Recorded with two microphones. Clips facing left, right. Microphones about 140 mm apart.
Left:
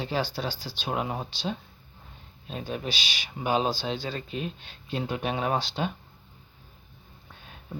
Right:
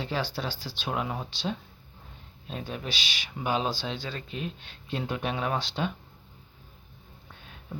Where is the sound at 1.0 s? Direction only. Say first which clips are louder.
Left 2 dB; 30° left (ahead or behind).